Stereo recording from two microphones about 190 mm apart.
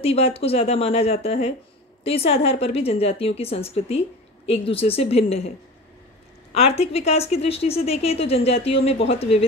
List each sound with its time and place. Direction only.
0.0 s speech: 30° left (ahead or behind)
6.5 s speech: 30° left (ahead or behind)